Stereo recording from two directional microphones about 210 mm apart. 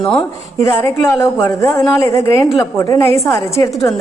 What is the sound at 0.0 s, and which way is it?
A woman's voice, 15° left (ahead or behind).